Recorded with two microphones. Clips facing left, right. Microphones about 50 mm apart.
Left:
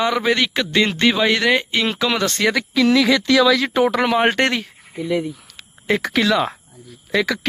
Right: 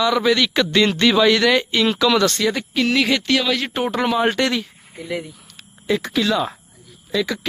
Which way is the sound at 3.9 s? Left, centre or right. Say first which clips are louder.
Left 2 dB; left.